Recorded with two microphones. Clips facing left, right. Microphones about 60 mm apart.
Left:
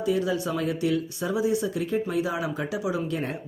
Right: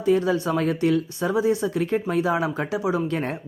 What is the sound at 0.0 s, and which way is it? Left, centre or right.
Speech, right.